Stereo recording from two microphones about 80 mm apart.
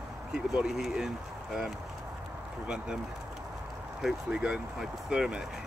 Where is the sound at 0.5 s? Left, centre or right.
Centre.